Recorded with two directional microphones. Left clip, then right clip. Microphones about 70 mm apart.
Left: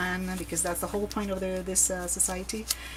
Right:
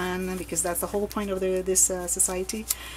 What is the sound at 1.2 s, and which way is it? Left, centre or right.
Speech, right.